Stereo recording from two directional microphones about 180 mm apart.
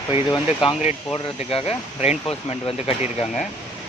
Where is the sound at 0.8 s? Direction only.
30° left (ahead or behind).